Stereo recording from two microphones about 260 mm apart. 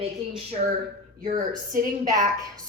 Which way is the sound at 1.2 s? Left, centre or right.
Right.